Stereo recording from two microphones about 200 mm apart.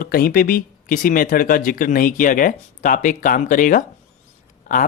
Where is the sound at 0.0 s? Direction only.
45° left (ahead or behind).